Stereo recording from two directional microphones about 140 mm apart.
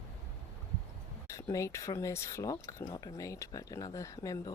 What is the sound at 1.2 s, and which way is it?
Speech, 20° left (ahead or behind).